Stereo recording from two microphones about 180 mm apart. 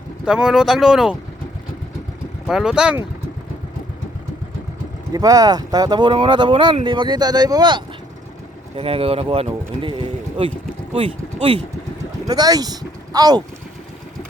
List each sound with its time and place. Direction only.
0.3 s speech: 5° right (ahead or behind)
2.5 s speech: 5° right (ahead or behind)
5.1 s speech: 20° right (ahead or behind)